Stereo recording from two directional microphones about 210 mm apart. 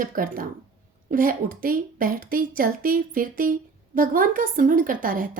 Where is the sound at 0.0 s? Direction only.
40° right (ahead or behind).